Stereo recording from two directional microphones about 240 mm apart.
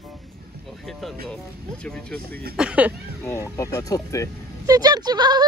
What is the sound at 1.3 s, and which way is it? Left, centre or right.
Speech, centre.